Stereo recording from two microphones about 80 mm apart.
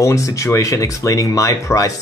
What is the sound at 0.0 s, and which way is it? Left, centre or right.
Speech, left.